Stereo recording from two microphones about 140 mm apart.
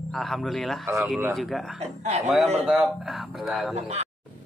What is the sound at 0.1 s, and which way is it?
Speech, centre (ahead or behind).